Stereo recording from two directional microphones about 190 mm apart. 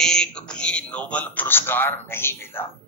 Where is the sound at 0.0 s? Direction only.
5° left (ahead or behind).